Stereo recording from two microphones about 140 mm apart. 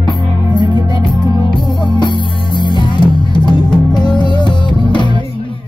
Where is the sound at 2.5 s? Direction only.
35° left (ahead or behind).